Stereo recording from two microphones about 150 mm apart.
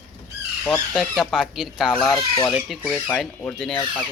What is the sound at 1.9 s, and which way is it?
Chicken, 25° left (ahead or behind).